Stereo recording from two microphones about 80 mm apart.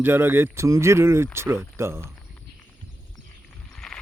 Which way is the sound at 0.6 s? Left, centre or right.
Right.